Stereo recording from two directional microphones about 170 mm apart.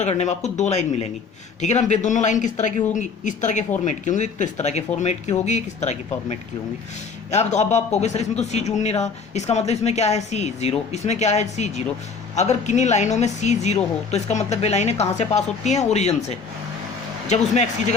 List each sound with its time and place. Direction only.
0.0 s a man's voice: 40° left (ahead or behind)